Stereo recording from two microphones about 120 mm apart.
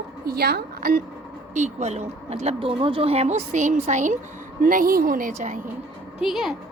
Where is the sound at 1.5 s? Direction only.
75° right (ahead or behind).